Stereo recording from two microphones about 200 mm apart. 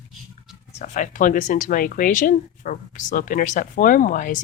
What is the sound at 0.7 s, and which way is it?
Speech, 40° left (ahead or behind).